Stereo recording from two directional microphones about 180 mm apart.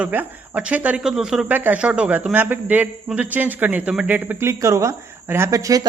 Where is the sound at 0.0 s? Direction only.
10° right (ahead or behind).